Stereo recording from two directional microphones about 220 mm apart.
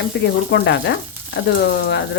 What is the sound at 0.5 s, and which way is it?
Frying, 50° left (ahead or behind).